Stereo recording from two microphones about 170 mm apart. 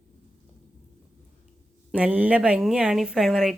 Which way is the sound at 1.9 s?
10° right (ahead or behind).